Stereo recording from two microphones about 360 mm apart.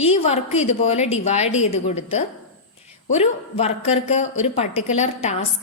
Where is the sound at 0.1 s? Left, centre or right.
Centre.